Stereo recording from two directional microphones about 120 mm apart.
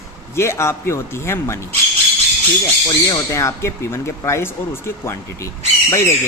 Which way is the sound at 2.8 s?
30° left (ahead or behind).